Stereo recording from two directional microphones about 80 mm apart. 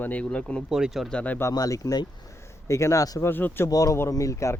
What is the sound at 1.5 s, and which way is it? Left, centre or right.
Speech, left.